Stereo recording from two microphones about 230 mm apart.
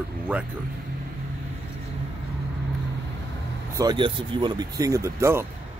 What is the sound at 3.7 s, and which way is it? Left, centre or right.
Speech, centre.